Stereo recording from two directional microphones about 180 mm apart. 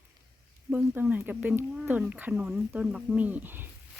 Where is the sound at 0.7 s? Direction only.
10° right (ahead or behind).